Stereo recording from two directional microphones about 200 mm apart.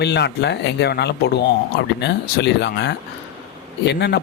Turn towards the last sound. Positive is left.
turn(degrees=60)  # may be behind; listen again after turning